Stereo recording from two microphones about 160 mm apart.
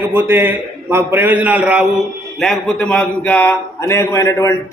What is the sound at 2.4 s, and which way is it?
A man's voice, 5° left (ahead or behind).